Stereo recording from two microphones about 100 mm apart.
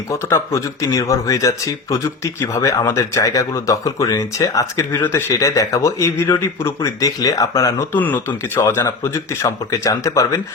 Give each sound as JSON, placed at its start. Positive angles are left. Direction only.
{"t": 0.1, "sound": "speech", "side_deg": 30}
{"t": 7.9, "sound": "speech", "side_deg": 20}